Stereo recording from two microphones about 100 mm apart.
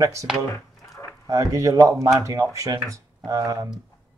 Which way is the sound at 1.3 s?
35° right (ahead or behind).